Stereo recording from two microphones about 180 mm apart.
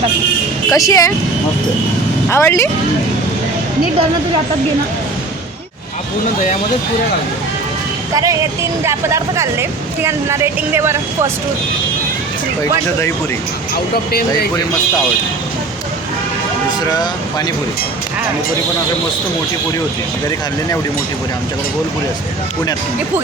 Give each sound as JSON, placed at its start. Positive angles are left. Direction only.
{"t": 0.7, "sound": "speech", "side_deg": 20}
{"t": 2.3, "sound": "speech", "side_deg": 15}
{"t": 8.1, "sound": "speech", "side_deg": -20}
{"t": 14.1, "sound": "speech", "side_deg": 60}